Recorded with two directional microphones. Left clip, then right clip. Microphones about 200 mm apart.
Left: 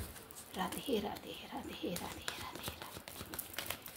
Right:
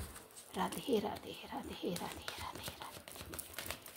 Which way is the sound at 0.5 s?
40° right (ahead or behind).